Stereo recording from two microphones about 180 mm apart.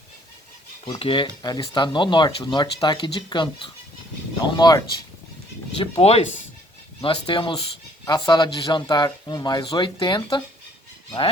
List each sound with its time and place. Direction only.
0.9 s speech: 30° left (ahead or behind)
6.0 s speech: 35° left (ahead or behind)